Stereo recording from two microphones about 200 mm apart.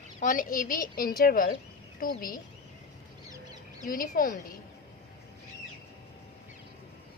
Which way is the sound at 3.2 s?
20° right (ahead or behind).